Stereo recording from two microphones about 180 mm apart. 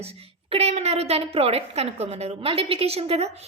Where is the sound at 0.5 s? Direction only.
35° right (ahead or behind).